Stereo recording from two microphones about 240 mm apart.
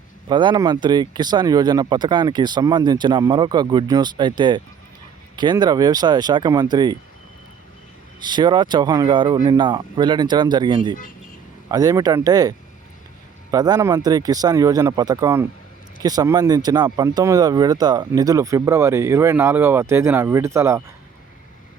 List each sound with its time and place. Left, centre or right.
0.3 s speech: centre
8.2 s speech: centre